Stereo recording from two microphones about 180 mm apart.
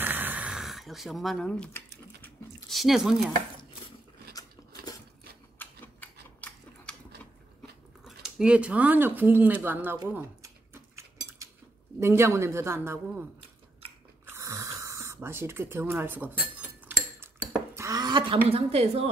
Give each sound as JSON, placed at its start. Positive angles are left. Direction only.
{"t": 0.0, "sound": "a sound", "side_deg": -10}
{"t": 4.3, "sound": "biting", "side_deg": 20}
{"t": 5.6, "sound": "typewriter", "side_deg": 10}
{"t": 8.0, "sound": "speech", "side_deg": -5}
{"t": 10.1, "sound": "cutlery", "side_deg": -15}
{"t": 12.0, "sound": "a woman's voice", "side_deg": -15}
{"t": 14.2, "sound": "a sound", "side_deg": -15}
{"t": 17.2, "sound": "dishes", "side_deg": -15}
{"t": 18.5, "sound": "a woman's voice", "side_deg": -35}